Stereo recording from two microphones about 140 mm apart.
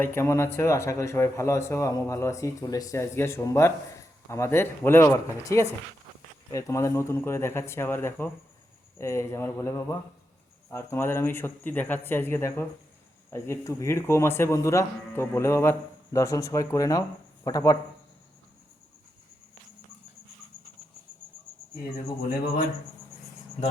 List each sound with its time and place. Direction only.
0.0 s speech: 20° left (ahead or behind)